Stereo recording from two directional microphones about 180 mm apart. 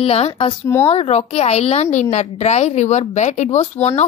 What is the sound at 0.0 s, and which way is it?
A woman's voice, 35° left (ahead or behind).